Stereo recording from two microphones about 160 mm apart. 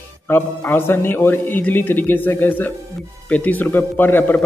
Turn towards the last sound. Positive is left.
turn(degrees=10)  # may be behind; listen again after turning